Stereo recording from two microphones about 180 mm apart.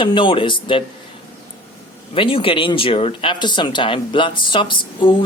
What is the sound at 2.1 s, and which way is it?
Speech, 30° left (ahead or behind).